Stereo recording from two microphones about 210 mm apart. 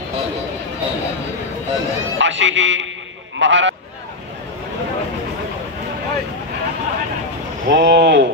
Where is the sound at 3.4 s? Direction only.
60° right (ahead or behind).